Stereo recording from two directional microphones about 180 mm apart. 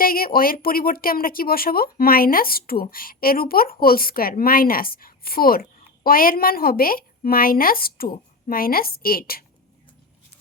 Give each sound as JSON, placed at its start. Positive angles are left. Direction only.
{"t": 0.0, "sound": "a woman's voice", "side_deg": 55}